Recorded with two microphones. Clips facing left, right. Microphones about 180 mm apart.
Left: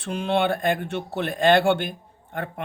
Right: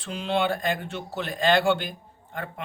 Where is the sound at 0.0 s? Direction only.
55° left (ahead or behind).